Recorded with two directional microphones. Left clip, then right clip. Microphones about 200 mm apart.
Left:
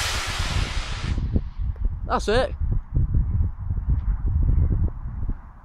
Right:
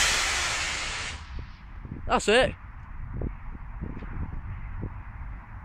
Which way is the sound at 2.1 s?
5° left (ahead or behind).